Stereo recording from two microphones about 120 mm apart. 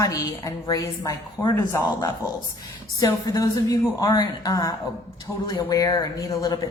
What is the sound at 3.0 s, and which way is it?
A woman's voice, 30° left (ahead or behind).